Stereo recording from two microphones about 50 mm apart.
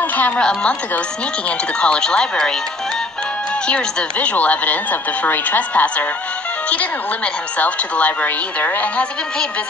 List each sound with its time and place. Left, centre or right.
0.4 s speech: centre
1.8 s speech: centre
3.6 s a woman's voice: left
7.5 s a woman's voice: left